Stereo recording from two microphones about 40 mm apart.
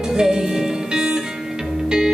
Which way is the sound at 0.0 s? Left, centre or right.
Centre.